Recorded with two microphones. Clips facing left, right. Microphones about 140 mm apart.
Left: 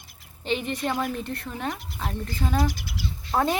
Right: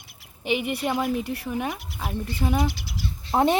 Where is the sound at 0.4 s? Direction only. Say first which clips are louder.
Right 2 dB; 10° right (ahead or behind).